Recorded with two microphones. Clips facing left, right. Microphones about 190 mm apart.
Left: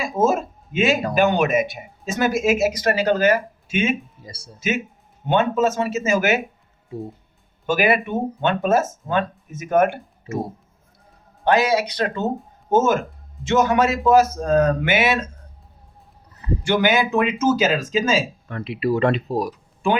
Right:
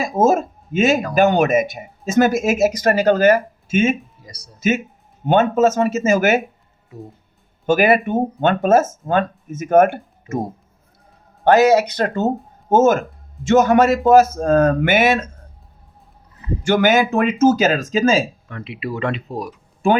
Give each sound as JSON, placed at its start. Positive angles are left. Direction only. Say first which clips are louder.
{"t": 0.0, "sound": "speech", "louder": "right 4 dB", "side_deg": -45}
{"t": 4.2, "sound": "a sound", "louder": "left 2 dB", "side_deg": 25}
{"t": 5.2, "sound": "speech", "louder": "right 4 dB", "side_deg": -45}
{"t": 6.9, "sound": "speech", "louder": "left 5 dB", "side_deg": 30}
{"t": 7.7, "sound": "speech", "louder": "right 4 dB", "side_deg": -45}
{"t": 11.4, "sound": "speech", "louder": "right 6 dB", "side_deg": -45}
{"t": 16.6, "sound": "speech", "louder": "right 4 dB", "side_deg": -45}
{"t": 18.4, "sound": "speech", "louder": "left 5 dB", "side_deg": 40}